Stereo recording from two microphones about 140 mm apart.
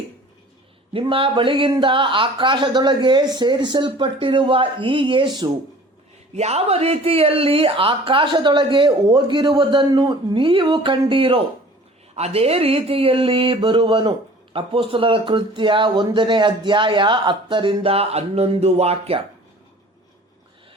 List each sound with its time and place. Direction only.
0.9 s speech: 40° right (ahead or behind)
6.3 s speech: 50° right (ahead or behind)